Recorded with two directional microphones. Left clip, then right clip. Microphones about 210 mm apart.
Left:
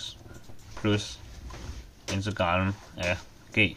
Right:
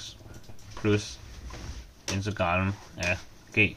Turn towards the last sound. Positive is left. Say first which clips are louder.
# even
turn(degrees=10)  # may be behind; listen again after turning